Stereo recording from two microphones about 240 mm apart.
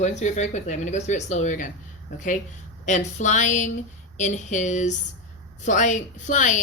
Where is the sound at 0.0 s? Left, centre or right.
Left.